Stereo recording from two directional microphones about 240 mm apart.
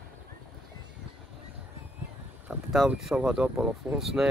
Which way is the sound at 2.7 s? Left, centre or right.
Centre.